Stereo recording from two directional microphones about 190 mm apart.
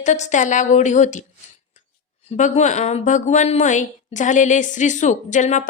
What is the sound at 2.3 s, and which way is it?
A woman's voice, 40° left (ahead or behind).